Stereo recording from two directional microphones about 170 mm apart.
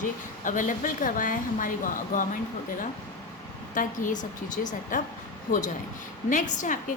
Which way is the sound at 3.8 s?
50° left (ahead or behind).